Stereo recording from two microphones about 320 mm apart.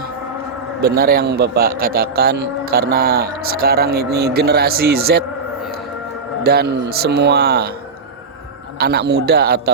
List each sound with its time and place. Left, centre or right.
0.8 s a man's voice: right
6.4 s a man's voice: right
8.8 s a man's voice: right